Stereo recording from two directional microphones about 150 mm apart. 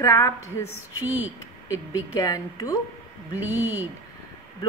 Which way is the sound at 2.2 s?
25° left (ahead or behind).